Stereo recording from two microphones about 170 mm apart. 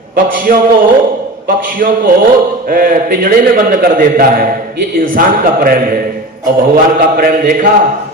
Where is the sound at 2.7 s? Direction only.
55° right (ahead or behind).